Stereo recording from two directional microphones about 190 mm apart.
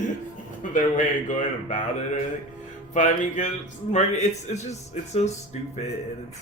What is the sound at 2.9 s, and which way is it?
A man's voice, 40° left (ahead or behind).